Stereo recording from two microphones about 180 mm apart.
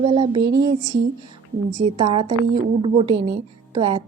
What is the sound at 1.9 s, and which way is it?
A woman's voice, 30° right (ahead or behind).